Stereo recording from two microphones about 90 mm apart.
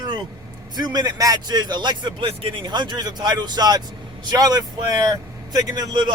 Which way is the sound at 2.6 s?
55° right (ahead or behind).